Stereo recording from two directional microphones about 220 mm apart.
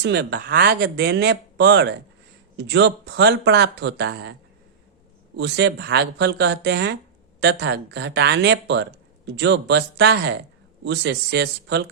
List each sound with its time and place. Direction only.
0.0 s speech: 50° right (ahead or behind)
5.4 s speech: 50° right (ahead or behind)